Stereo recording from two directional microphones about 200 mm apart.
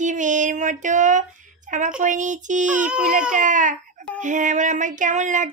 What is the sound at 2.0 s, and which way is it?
Child singing, 40° right (ahead or behind).